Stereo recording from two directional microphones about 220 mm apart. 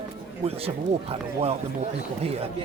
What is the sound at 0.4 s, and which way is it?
Speech, 25° right (ahead or behind).